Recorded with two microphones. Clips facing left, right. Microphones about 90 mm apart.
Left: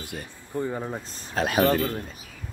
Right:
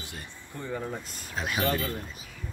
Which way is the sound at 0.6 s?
40° left (ahead or behind).